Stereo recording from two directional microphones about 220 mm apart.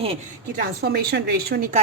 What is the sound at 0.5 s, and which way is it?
A woman's voice, 45° right (ahead or behind).